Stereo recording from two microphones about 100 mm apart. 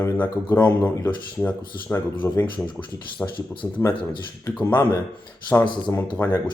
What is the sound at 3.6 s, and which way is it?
Speech, 25° left (ahead or behind).